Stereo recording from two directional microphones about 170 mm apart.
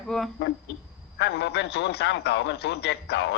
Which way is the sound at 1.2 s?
85° left.